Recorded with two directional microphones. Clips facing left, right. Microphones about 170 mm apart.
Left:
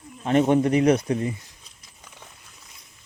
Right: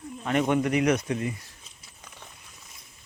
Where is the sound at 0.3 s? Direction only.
30° left (ahead or behind).